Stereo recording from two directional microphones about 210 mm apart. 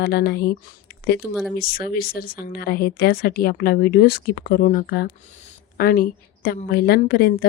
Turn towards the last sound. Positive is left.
turn(degrees=45)  # may be behind; listen again after turning